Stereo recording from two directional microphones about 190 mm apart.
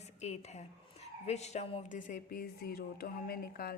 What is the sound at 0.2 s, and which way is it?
A woman's voice, 35° left (ahead or behind).